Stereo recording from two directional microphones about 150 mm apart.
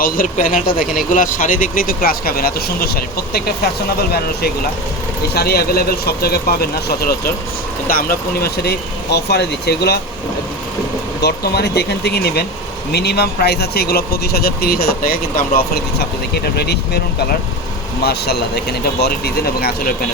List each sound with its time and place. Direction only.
0.0 s speech: 65° left (ahead or behind); by 7.3 s 90° left
7.9 s speech: 75° left (ahead or behind)
11.2 s speech: 90° left
18.0 s speech: 90° left